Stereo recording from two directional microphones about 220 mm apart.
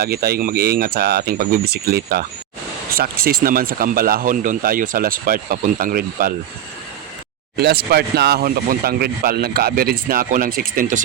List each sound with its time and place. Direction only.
0.0 s speech: 45° right (ahead or behind)
7.5 s speech: 45° right (ahead or behind)